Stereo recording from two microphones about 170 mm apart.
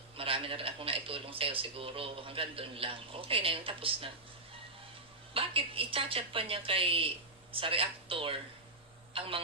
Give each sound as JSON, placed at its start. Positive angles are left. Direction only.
{"t": 0.2, "sound": "speech", "side_deg": -30}
{"t": 5.3, "sound": "speech", "side_deg": -30}